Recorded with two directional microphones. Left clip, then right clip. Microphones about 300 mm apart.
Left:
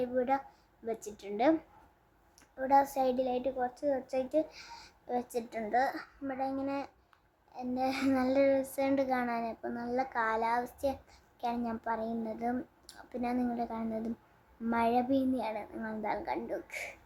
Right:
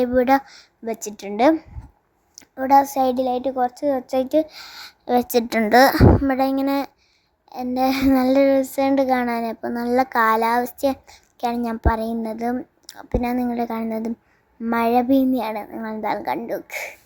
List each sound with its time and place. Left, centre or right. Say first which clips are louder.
0.0 s a child's voice: right 14 dB; right